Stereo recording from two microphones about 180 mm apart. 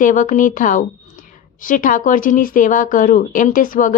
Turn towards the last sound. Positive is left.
turn(degrees=45)  # may be behind; listen again after turning